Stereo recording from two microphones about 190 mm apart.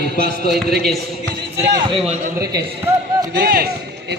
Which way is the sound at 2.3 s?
55° right (ahead or behind).